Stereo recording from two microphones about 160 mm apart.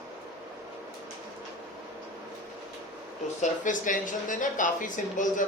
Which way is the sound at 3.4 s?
55° left (ahead or behind).